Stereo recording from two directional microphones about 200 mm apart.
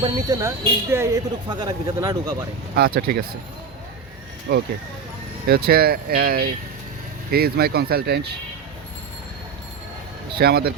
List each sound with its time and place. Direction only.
0.0 s speech: 20° right (ahead or behind)
2.7 s speech: 50° right (ahead or behind)
4.5 s speech: 55° right (ahead or behind)
10.3 s speech: 50° right (ahead or behind)